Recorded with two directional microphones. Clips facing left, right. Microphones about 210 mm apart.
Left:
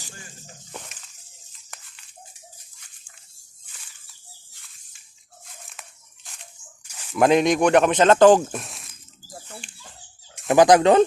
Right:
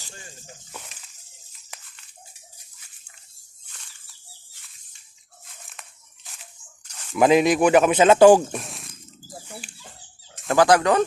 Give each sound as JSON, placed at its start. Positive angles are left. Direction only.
{"t": 5.5, "sound": "a sound", "side_deg": 0}
{"t": 6.8, "sound": "speech", "side_deg": 5}
{"t": 8.4, "sound": "zipper", "side_deg": 0}
{"t": 9.6, "sound": "dog", "side_deg": -5}
{"t": 10.5, "sound": "speech", "side_deg": 20}